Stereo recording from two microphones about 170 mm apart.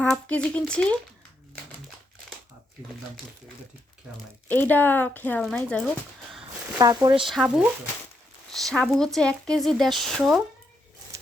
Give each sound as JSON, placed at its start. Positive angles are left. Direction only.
{"t": 0.0, "sound": "speech", "side_deg": 5}
{"t": 4.4, "sound": "speech", "side_deg": 10}
{"t": 6.7, "sound": "speech", "side_deg": -20}
{"t": 7.3, "sound": "speech", "side_deg": 0}